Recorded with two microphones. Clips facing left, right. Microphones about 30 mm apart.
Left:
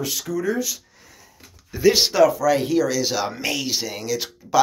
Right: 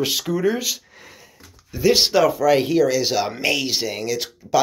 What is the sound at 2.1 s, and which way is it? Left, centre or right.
Speech, right.